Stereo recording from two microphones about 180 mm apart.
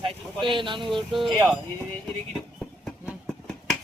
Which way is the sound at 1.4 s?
Centre (ahead or behind).